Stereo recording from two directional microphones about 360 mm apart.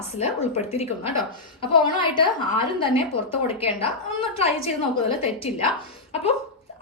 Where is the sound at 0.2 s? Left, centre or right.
Centre.